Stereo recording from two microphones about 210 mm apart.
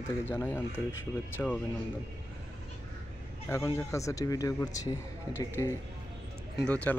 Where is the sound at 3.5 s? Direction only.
15° left (ahead or behind).